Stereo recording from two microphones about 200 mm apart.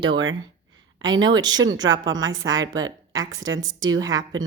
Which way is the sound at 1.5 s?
70° right (ahead or behind).